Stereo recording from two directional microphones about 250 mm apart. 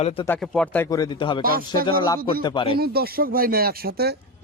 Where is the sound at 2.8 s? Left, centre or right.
Right.